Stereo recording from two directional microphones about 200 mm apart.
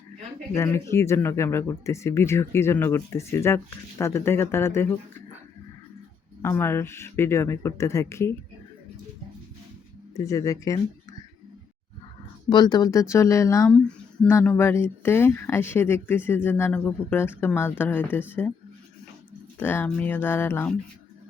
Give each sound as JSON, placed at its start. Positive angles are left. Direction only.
{"t": 0.5, "sound": "speech", "side_deg": 15}
{"t": 6.4, "sound": "speech", "side_deg": 10}
{"t": 10.2, "sound": "speech", "side_deg": 15}
{"t": 12.5, "sound": "speech", "side_deg": 20}
{"t": 19.5, "sound": "speech", "side_deg": 10}